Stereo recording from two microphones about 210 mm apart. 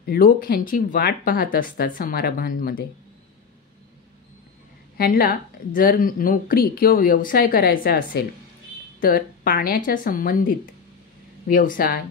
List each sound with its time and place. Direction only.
0.0 s speech: 45° left (ahead or behind)
4.9 s a woman's voice: 45° left (ahead or behind)